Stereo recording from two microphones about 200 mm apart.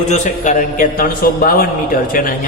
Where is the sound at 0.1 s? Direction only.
40° left (ahead or behind).